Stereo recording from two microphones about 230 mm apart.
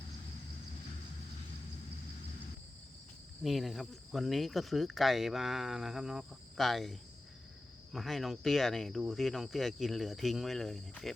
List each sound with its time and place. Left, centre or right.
3.4 s speech: centre